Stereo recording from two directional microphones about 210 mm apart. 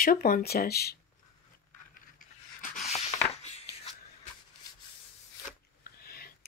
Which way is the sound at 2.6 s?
35° left (ahead or behind).